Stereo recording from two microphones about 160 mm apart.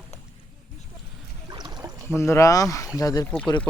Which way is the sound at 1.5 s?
25° right (ahead or behind).